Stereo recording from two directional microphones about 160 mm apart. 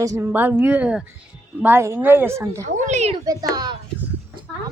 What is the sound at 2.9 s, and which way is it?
Speech, 45° right (ahead or behind).